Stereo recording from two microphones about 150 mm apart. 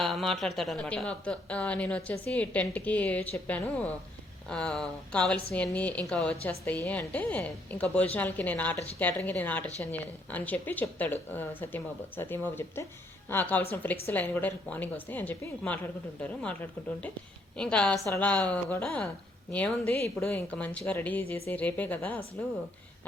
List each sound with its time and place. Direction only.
0.0 s a woman's voice: 5° left (ahead or behind)
17.6 s a woman's voice: 5° left (ahead or behind)